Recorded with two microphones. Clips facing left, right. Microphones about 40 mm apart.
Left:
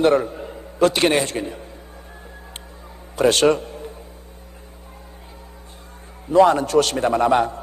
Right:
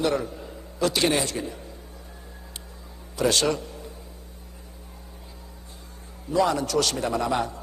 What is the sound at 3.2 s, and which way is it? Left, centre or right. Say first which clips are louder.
Speech: left 7 dB; left.